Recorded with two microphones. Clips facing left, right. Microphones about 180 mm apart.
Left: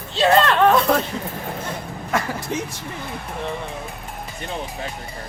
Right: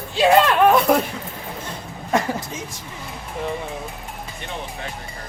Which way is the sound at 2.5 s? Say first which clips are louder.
Left 7 dB; 70° left (ahead or behind).